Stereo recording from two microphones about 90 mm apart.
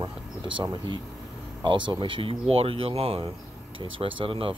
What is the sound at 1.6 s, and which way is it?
Speech, 65° right (ahead or behind).